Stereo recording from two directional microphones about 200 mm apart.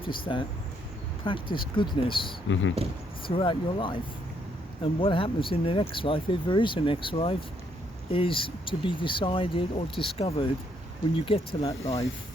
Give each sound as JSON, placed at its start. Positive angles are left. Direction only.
{"t": 0.0, "sound": "speech", "side_deg": 25}
{"t": 1.5, "sound": "speech", "side_deg": 25}